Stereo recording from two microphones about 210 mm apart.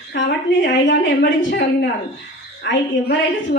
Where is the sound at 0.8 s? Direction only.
50° left (ahead or behind).